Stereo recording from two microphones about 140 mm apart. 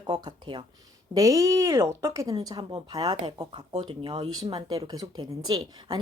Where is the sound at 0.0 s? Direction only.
30° right (ahead or behind).